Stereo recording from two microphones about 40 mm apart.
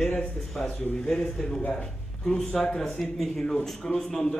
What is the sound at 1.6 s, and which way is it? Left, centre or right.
Speech, left.